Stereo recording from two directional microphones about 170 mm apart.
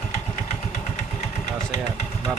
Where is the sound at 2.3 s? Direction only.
Centre (ahead or behind).